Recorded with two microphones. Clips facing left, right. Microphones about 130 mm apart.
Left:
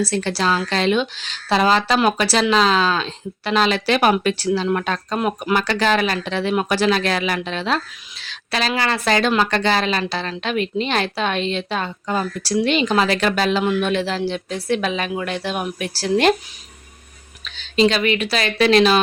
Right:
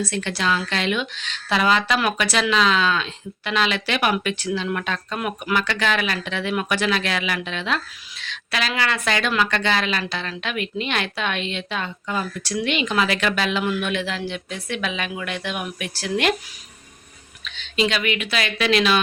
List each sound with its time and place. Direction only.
0.0 s a woman's voice: 35° left (ahead or behind)
17.4 s a woman's voice: 35° left (ahead or behind)